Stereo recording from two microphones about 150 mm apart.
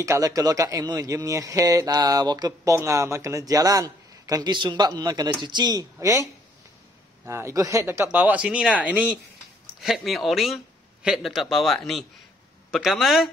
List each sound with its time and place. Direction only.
0.0 s speech: 20° right (ahead or behind)
7.2 s speech: 20° right (ahead or behind); by 13.3 s centre (ahead or behind)